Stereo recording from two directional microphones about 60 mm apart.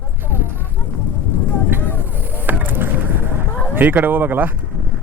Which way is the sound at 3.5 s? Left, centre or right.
Left.